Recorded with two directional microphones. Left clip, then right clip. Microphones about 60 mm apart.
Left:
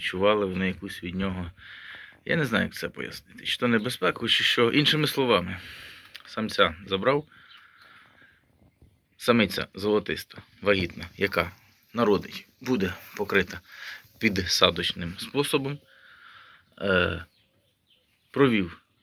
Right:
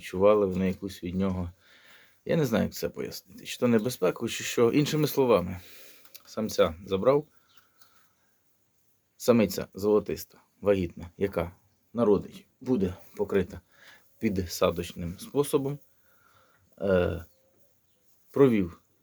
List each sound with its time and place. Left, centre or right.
0.0 s speech: right
1.6 s speech: right
9.2 s speech: right
11.9 s speech: right
13.4 s a sound: right
14.2 s speech: right
14.6 s speech: right
18.3 s speech: right